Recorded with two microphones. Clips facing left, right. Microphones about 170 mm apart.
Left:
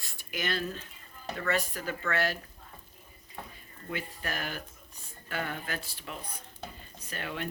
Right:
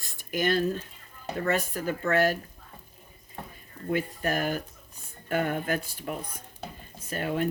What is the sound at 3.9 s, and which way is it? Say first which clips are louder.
Speech: right 9 dB; 45° right (ahead or behind).